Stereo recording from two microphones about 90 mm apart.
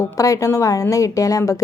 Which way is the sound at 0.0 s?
40° left (ahead or behind).